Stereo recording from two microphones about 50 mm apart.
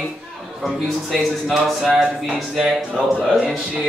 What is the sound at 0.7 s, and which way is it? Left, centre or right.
A man's voice, centre.